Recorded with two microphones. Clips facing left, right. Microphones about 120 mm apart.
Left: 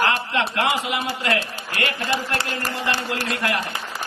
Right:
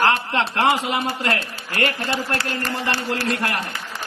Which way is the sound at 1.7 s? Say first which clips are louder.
Right 3 dB; 40° right (ahead or behind).